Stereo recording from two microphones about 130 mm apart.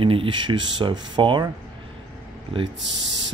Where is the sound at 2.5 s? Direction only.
45° right (ahead or behind).